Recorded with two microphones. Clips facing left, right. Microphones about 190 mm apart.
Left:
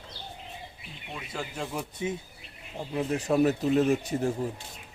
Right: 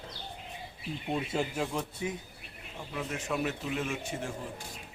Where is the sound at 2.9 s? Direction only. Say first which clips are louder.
Left 9 dB; 35° left (ahead or behind).